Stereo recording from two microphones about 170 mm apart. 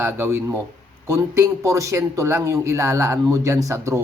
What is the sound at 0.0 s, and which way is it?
Speech, 15° right (ahead or behind).